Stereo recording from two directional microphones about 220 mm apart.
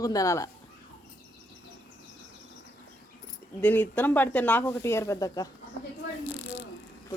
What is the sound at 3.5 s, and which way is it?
A woman's voice, 10° left (ahead or behind).